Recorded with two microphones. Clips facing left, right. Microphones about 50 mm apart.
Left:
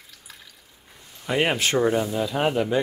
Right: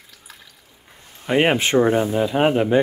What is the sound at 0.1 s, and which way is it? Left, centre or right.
Water, centre.